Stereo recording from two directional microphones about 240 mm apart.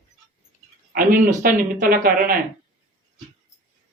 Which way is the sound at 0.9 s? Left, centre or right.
Right.